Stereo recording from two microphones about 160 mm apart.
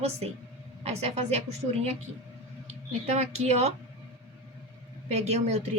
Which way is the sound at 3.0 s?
40° right (ahead or behind).